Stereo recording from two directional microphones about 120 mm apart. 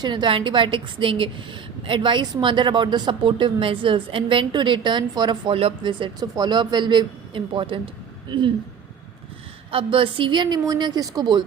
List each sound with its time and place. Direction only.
0.0 s a woman's voice: 40° right (ahead or behind)
9.7 s speech: 45° right (ahead or behind)